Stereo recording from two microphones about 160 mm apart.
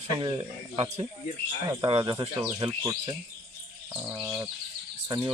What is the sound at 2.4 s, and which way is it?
Speech, 25° right (ahead or behind).